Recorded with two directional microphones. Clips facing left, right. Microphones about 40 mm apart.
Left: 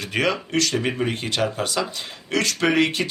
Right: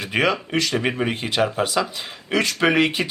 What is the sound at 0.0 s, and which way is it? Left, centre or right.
Speech, centre.